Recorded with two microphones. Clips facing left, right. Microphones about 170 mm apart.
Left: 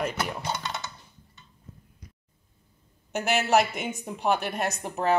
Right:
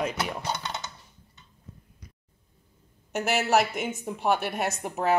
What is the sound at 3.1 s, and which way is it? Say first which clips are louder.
A woman's voice: left 1 dB; centre (ahead or behind).